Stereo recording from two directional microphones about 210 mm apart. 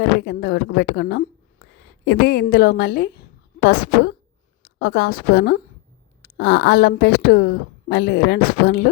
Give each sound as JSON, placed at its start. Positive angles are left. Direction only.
{"t": 0.0, "sound": "a woman's voice", "side_deg": 50}